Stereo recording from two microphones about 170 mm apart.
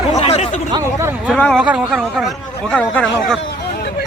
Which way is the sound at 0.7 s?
15° right (ahead or behind).